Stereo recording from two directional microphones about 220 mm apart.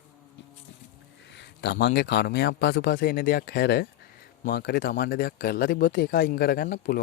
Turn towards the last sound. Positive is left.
turn(degrees=40)  # may be behind; listen again after turning